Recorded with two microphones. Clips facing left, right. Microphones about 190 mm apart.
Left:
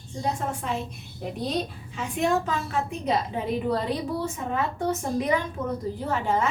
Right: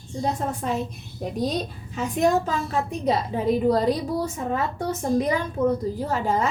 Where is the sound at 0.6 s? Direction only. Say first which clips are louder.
Right 4 dB; 40° right (ahead or behind).